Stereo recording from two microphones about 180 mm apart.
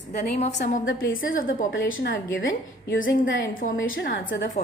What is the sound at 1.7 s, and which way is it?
Speech, 90° left.